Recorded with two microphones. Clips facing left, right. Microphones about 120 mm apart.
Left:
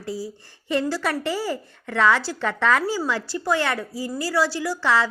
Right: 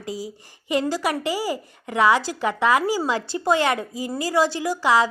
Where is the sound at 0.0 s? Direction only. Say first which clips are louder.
Left 1 dB; 15° right (ahead or behind).